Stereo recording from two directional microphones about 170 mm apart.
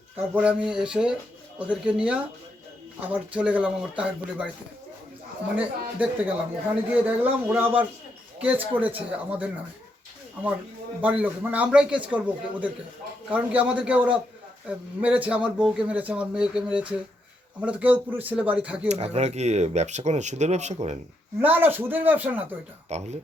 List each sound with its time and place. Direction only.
0.3 s speech: 5° right (ahead or behind)
5.5 s speech: 10° right (ahead or behind)
11.0 s speech: 10° right (ahead or behind)
18.9 s speech: 40° right (ahead or behind)
21.4 s speech: 10° right (ahead or behind)
22.9 s speech: 40° right (ahead or behind)